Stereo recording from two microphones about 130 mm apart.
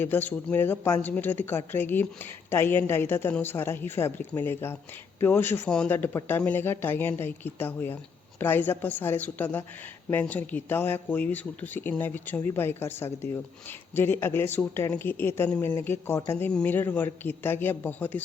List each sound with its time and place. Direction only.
0.0 s speech: 15° left (ahead or behind)
16.5 s speech: 10° left (ahead or behind)